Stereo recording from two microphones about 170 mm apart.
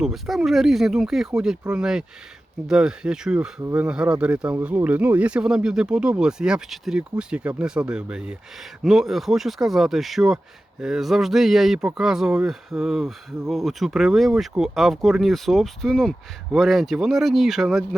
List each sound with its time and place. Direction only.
0.0 s speech: centre (ahead or behind)
3.6 s speech: 15° right (ahead or behind)
3.8 s speech: 5° right (ahead or behind)